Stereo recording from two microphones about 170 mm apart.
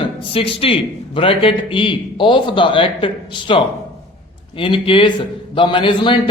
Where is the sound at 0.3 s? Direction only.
35° left (ahead or behind).